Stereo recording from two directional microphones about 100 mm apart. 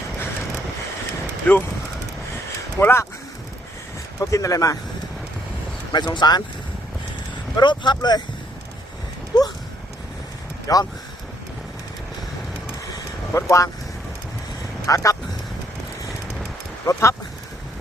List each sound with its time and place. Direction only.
1.5 s speech: 15° left (ahead or behind)
2.8 s speech: 25° left (ahead or behind)
4.2 s speech: 35° left (ahead or behind)
5.9 s speech: 45° left (ahead or behind)
7.5 s speech: 50° left (ahead or behind)
9.3 s speech: 45° left (ahead or behind)
10.7 s speech: 35° left (ahead or behind)
13.3 s speech: 30° left (ahead or behind)
14.8 s speech: 35° left (ahead or behind)
16.8 s speech: 30° left (ahead or behind)